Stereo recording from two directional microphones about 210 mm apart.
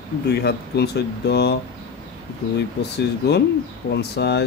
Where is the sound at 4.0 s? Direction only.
50° left (ahead or behind).